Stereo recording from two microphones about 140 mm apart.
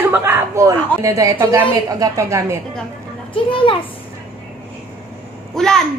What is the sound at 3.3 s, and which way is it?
Speech, 40° left (ahead or behind).